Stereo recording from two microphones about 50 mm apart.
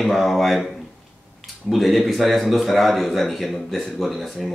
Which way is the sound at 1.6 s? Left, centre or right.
Centre.